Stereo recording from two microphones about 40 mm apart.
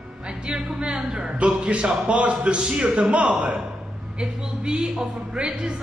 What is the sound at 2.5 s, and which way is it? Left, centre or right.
Speech, right.